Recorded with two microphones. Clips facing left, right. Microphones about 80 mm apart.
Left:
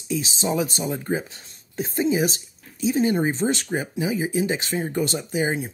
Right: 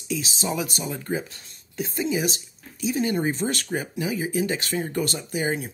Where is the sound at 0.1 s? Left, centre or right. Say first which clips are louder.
Left 3 dB; left.